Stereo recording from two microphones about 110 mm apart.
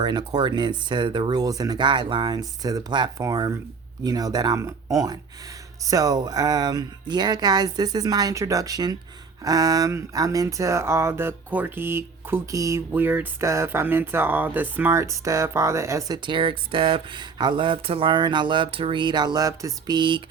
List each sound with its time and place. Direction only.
0.0 s speech: 40° right (ahead or behind)
12.9 s speech: 20° right (ahead or behind); by 20.2 s 45° right (ahead or behind)